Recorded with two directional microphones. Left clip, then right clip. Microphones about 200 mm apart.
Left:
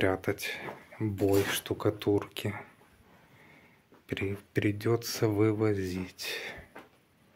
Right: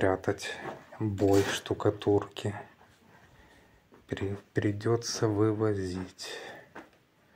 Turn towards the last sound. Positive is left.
turn(degrees=20)  # may be behind; listen again after turning